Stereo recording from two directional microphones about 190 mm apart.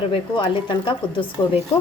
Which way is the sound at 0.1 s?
25° left (ahead or behind).